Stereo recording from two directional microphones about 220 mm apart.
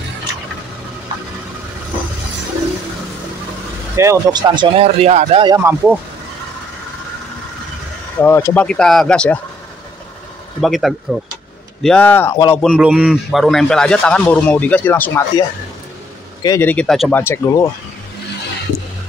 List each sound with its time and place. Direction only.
3.9 s speech: 15° right (ahead or behind)
5.6 s speech: 10° right (ahead or behind)
8.2 s a man's voice: 10° left (ahead or behind)
10.6 s a man's voice: centre (ahead or behind)
12.7 s a man's voice: 5° right (ahead or behind)
16.4 s speech: 10° left (ahead or behind)